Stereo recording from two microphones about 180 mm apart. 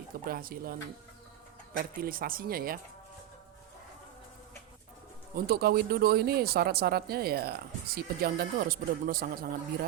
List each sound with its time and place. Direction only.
0.3 s speech: 55° right (ahead or behind)
1.8 s speech: 55° right (ahead or behind)
5.3 s speech: 55° right (ahead or behind)